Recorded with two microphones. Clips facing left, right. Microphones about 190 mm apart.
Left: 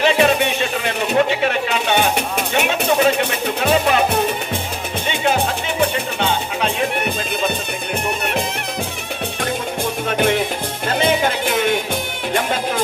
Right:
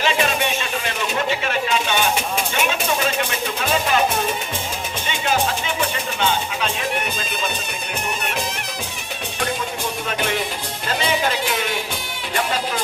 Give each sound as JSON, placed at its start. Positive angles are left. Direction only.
{"t": 0.0, "sound": "music", "side_deg": 60}
{"t": 1.0, "sound": "a sound", "side_deg": 60}
{"t": 5.1, "sound": "music", "side_deg": 60}
{"t": 9.4, "sound": "music", "side_deg": 55}